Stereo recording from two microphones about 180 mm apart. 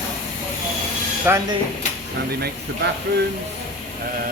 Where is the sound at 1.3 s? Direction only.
10° right (ahead or behind).